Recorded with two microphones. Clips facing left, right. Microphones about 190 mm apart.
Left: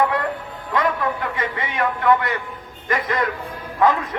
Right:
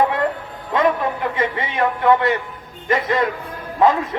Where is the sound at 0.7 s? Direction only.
25° right (ahead or behind).